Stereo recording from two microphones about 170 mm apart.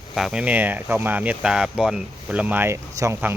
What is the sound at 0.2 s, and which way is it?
Speech, 5° right (ahead or behind).